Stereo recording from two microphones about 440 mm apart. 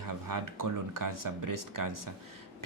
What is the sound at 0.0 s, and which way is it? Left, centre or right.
Speech, right.